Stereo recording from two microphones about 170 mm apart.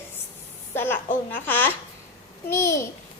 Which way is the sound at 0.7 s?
15° left (ahead or behind).